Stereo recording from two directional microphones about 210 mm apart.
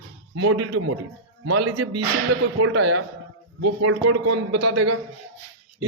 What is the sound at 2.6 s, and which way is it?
Speech, 65° right (ahead or behind).